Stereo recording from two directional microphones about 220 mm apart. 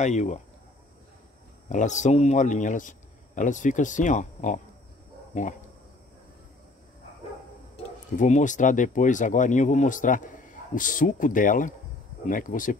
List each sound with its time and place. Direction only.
0.0 s speech: 30° left (ahead or behind)
1.7 s speech: 35° left (ahead or behind)
7.7 s speech: 35° left (ahead or behind)